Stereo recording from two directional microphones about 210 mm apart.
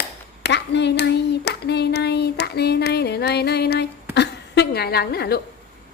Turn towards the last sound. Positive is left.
turn(degrees=50)  # may be behind; listen again after turning